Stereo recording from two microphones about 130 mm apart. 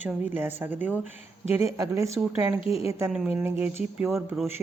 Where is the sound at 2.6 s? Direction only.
45° left (ahead or behind).